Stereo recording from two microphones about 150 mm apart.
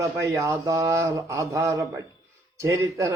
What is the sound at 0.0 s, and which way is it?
A man's voice, 20° right (ahead or behind).